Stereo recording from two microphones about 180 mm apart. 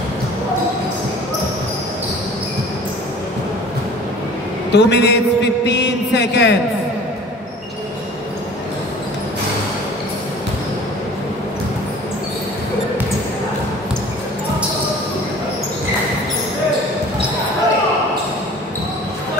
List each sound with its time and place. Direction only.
4.7 s a man's voice: 75° left (ahead or behind)